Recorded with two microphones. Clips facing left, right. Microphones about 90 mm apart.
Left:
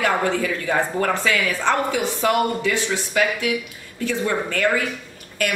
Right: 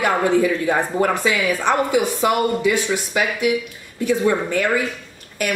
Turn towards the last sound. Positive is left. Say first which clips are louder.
# right 1 dB
turn(degrees=-15)  # may be behind; listen again after turning